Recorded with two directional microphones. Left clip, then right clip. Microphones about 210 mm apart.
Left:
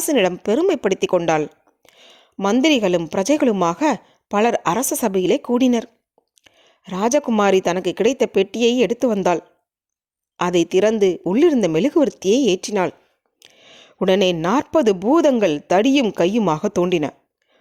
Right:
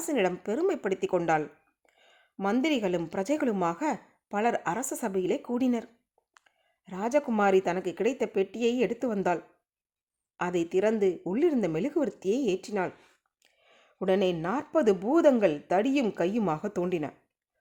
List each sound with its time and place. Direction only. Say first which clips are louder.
0.0 s a woman's voice: left 10 dB; 35° left (ahead or behind)
13.6 s a sound: left 13 dB; 40° left (ahead or behind)
14.7 s a woman's voice: left 7 dB; 35° left (ahead or behind)